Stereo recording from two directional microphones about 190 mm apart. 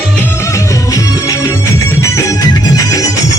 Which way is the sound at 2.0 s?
20° left (ahead or behind).